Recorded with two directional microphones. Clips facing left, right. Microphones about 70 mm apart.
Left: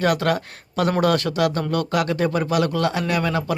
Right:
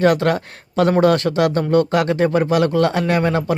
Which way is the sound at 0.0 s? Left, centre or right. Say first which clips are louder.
Right 4 dB; right.